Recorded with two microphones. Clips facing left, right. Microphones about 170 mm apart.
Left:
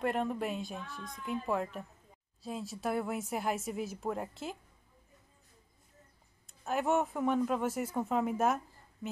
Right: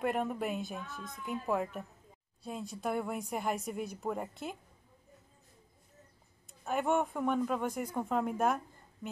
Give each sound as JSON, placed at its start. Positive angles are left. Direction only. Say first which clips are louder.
{"t": 0.0, "sound": "speech", "louder": "even", "side_deg": 0}
{"t": 6.4, "sound": "speech", "louder": "even", "side_deg": 0}